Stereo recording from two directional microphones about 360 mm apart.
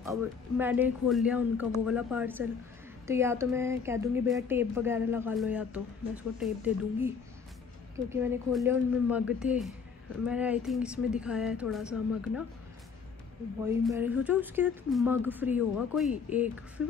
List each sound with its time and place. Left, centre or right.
0.0 s speech: centre
13.7 s speech: centre